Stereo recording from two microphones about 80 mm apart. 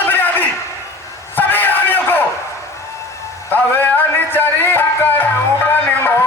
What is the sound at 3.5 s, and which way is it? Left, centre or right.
Music, left.